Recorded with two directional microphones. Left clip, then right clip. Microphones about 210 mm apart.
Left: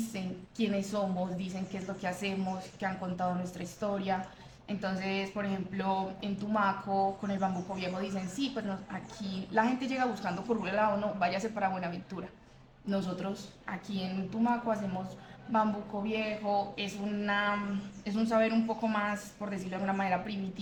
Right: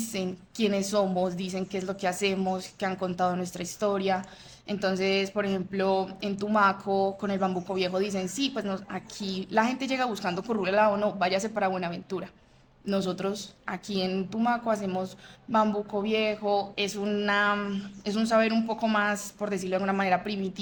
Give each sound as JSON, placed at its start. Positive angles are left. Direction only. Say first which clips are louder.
{"t": 0.1, "sound": "a woman's voice", "louder": "right 8 dB", "side_deg": -50}
{"t": 16.0, "sound": "a woman's voice", "louder": "right 5 dB", "side_deg": -55}